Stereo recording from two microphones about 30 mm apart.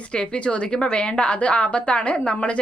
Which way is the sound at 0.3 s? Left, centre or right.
Left.